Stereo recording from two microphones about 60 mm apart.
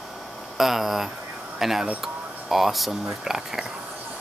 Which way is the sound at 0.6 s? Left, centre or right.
Centre.